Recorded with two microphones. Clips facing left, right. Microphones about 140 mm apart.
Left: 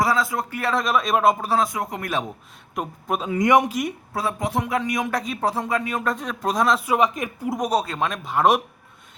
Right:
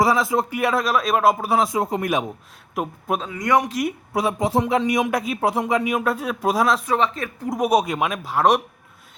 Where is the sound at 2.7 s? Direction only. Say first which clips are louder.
Right 2 dB; 5° right (ahead or behind).